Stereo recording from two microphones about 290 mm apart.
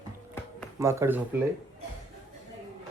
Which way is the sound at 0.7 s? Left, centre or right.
Centre.